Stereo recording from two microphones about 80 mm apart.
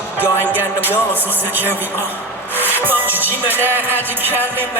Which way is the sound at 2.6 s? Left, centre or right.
Right.